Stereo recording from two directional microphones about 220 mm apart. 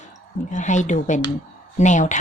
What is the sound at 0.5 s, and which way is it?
A woman's voice, 35° left (ahead or behind).